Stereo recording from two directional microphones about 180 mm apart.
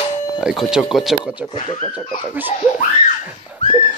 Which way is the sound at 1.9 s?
5° right (ahead or behind).